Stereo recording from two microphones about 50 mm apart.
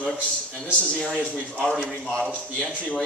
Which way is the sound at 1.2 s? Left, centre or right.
Left.